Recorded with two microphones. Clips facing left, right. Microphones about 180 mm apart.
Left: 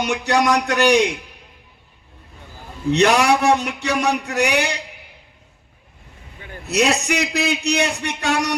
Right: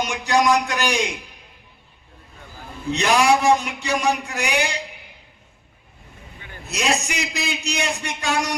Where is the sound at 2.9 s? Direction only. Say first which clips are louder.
Left 2 dB; 65° left (ahead or behind).